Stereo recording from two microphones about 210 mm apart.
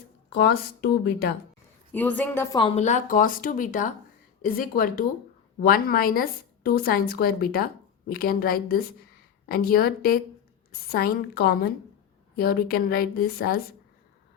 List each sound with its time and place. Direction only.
0.3 s a woman's voice: 50° left (ahead or behind)
1.9 s a woman's voice: 10° left (ahead or behind); by 13.7 s 45° left (ahead or behind)